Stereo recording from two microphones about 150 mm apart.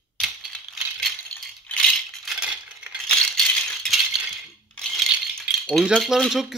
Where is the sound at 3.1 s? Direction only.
5° left (ahead or behind).